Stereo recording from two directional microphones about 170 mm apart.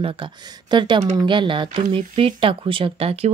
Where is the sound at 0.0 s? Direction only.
30° right (ahead or behind).